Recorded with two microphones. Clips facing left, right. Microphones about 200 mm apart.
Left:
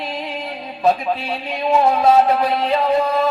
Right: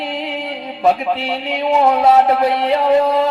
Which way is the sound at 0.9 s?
75° right (ahead or behind).